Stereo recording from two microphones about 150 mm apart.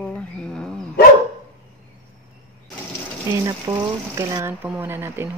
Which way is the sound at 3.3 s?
25° right (ahead or behind).